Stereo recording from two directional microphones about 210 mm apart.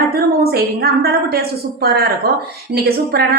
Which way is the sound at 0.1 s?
50° right (ahead or behind).